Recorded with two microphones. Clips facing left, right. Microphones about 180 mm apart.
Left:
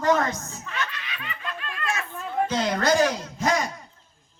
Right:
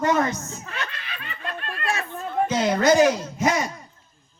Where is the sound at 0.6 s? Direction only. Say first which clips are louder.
Left 1 dB; 35° right (ahead or behind).